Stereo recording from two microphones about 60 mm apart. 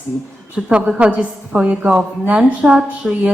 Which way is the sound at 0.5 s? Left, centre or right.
Centre.